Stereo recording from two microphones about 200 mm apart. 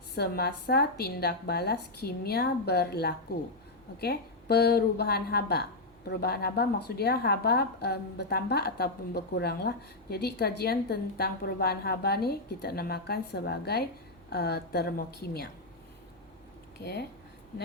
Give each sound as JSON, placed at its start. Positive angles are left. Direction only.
{"t": 0.2, "sound": "a woman's voice", "side_deg": 50}
{"t": 16.8, "sound": "speech", "side_deg": 55}